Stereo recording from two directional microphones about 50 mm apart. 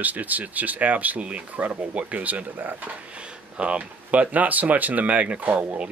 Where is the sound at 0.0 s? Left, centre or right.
Right.